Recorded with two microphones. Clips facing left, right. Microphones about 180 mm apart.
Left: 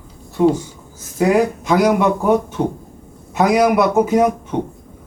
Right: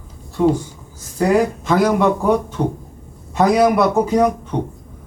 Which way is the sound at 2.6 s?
10° left (ahead or behind).